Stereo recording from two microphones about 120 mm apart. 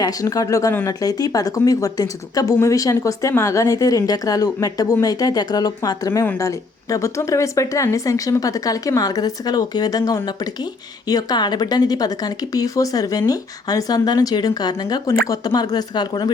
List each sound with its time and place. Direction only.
0.0 s speech: 30° left (ahead or behind)